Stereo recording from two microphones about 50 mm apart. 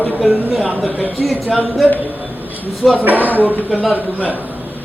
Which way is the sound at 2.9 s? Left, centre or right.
Right.